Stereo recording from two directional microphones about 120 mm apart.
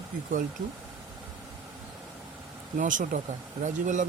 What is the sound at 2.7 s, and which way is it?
Speech, 90° right.